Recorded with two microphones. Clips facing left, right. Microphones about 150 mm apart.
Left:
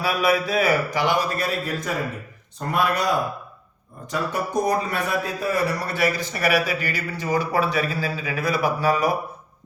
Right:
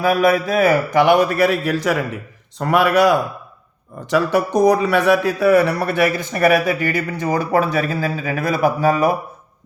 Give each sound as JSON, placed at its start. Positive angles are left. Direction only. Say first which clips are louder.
{"t": 0.0, "sound": "a man's voice", "louder": "right 6 dB", "side_deg": -50}